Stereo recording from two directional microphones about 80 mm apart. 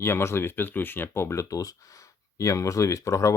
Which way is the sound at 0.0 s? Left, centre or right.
Left.